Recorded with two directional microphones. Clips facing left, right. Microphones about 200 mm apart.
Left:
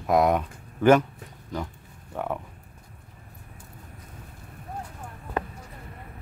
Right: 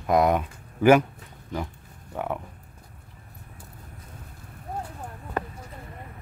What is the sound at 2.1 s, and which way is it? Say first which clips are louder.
Speech: even; centre (ahead or behind).